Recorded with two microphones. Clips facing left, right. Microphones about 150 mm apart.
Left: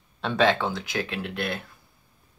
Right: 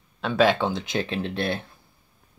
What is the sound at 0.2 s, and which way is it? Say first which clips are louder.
Speech: right 2 dB; centre (ahead or behind).